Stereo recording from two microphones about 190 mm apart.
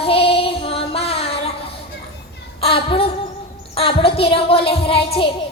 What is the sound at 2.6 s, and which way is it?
A woman's voice, 30° left (ahead or behind).